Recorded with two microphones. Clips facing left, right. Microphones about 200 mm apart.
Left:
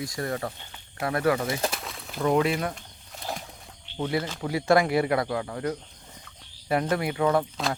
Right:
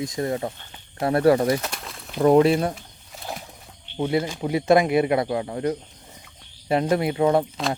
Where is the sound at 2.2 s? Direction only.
35° right (ahead or behind).